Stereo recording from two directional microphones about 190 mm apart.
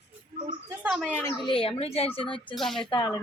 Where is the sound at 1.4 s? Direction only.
30° left (ahead or behind).